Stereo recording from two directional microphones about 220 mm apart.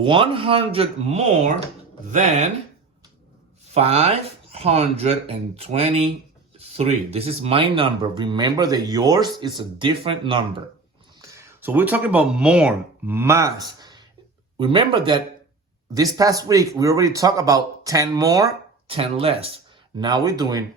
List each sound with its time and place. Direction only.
0.0 s speech: 25° right (ahead or behind)
3.7 s speech: 25° right (ahead or behind)
11.2 s speech: 15° right (ahead or behind)